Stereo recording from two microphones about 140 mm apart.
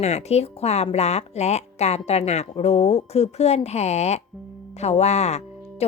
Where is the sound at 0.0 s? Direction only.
50° left (ahead or behind).